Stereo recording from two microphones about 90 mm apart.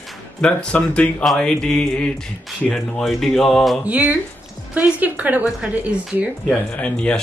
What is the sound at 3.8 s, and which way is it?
A woman's voice, 15° right (ahead or behind).